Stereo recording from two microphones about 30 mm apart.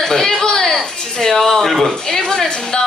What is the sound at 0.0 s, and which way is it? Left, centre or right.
Speech, centre.